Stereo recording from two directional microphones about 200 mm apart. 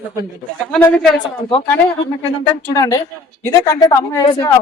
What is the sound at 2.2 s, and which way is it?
Speech, 15° left (ahead or behind).